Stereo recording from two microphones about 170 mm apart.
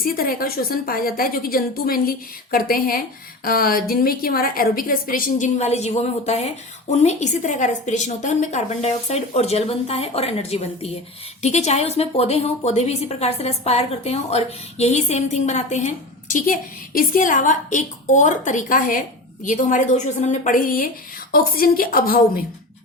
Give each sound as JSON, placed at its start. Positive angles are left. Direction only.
{"t": 0.0, "sound": "a woman's voice", "side_deg": 60}
{"t": 16.3, "sound": "a woman's voice", "side_deg": 55}